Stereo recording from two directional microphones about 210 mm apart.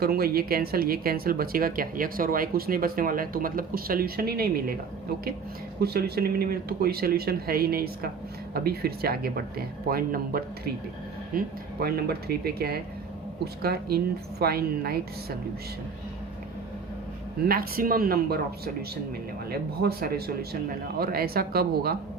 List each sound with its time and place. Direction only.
0.0 s speech: 45° right (ahead or behind)
5.8 s speech: 50° right (ahead or behind)
17.4 s speech: 45° right (ahead or behind)